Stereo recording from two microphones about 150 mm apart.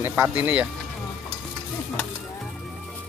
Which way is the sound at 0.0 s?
15° right (ahead or behind).